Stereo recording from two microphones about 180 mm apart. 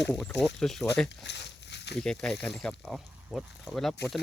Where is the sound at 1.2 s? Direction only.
70° left (ahead or behind).